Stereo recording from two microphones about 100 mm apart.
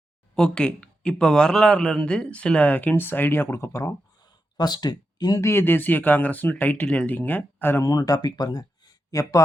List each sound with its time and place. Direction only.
0.3 s speech: 10° left (ahead or behind); by 3.9 s 30° left (ahead or behind)
4.2 s a sound: 45° left (ahead or behind)
5.5 s speech: 20° left (ahead or behind)
7.9 s speech: 35° left (ahead or behind)